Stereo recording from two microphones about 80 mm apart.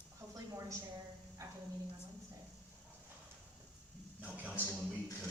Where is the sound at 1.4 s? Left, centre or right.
Right.